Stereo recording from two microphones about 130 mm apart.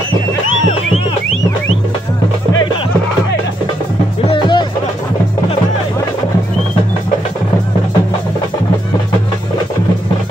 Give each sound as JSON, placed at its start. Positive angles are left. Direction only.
{"t": 4.3, "sound": "music", "side_deg": 35}